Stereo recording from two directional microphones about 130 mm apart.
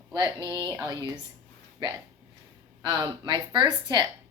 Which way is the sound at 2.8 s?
30° right (ahead or behind).